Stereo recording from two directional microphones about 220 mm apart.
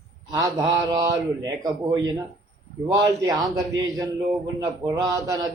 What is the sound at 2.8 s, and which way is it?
A man's voice, 15° right (ahead or behind).